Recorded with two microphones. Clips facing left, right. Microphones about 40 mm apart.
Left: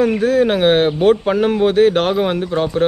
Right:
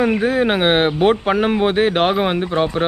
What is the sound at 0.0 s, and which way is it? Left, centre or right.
Speech, right.